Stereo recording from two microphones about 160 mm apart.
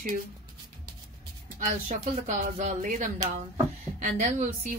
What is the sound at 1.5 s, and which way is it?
Speech, 55° right (ahead or behind).